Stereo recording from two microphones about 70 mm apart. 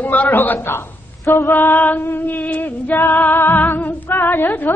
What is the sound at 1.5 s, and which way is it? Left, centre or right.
A man's voice, left.